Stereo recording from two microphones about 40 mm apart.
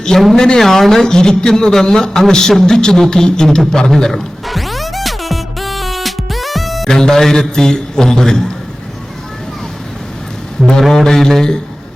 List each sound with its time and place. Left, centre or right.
0.3 s a man's voice: centre
3.7 s music: centre
6.9 s a man's voice: centre
10.8 s a man's voice: centre